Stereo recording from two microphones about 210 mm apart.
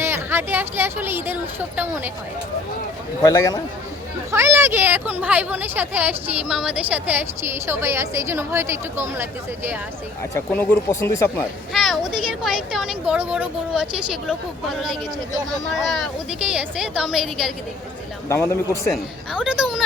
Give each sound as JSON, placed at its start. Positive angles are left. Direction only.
{"t": 0.0, "sound": "speech", "side_deg": -10}
{"t": 3.2, "sound": "speech", "side_deg": 15}
{"t": 4.3, "sound": "speech", "side_deg": -10}
{"t": 10.3, "sound": "speech", "side_deg": 10}
{"t": 11.7, "sound": "speech", "side_deg": 0}
{"t": 18.3, "sound": "speech", "side_deg": 10}
{"t": 19.3, "sound": "speech", "side_deg": -5}